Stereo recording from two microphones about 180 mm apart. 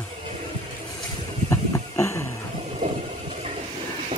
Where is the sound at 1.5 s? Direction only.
15° left (ahead or behind).